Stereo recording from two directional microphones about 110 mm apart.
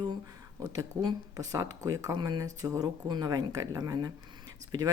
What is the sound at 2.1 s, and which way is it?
Speech, 45° right (ahead or behind).